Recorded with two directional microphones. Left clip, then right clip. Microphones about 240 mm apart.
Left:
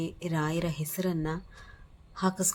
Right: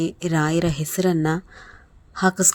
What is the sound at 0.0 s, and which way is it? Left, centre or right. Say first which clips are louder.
A woman's voice: right 10 dB; right.